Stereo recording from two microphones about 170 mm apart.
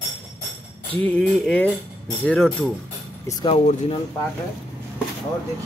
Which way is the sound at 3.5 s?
40° left (ahead or behind).